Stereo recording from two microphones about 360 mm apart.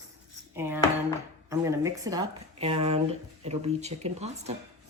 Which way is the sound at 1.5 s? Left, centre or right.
Centre.